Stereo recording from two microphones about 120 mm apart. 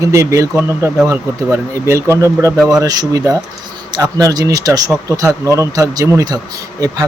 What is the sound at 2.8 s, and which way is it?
Speech, 30° right (ahead or behind).